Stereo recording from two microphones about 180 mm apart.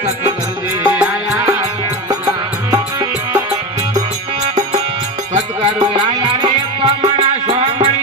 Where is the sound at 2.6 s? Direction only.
20° right (ahead or behind).